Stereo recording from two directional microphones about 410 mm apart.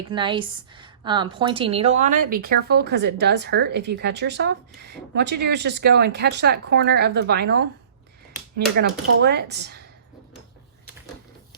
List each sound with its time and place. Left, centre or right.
0.1 s a woman's voice: centre